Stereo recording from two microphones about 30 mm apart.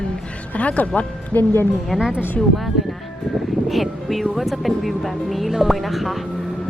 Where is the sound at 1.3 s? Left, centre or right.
Left.